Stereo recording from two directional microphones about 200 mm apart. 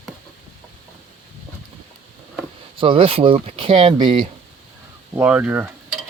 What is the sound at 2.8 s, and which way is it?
Speech, 25° right (ahead or behind).